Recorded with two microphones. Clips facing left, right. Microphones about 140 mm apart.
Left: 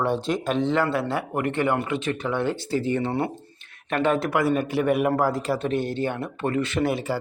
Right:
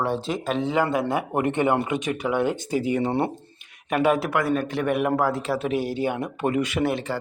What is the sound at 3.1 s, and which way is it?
Speech, 25° right (ahead or behind).